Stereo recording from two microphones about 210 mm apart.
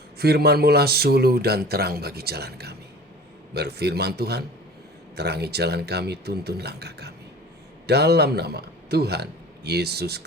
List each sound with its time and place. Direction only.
0.2 s a man's voice: 50° right (ahead or behind)